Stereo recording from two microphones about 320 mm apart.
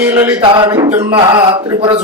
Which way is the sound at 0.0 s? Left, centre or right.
Centre.